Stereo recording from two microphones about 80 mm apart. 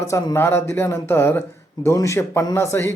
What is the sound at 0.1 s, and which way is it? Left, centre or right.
Speech, left.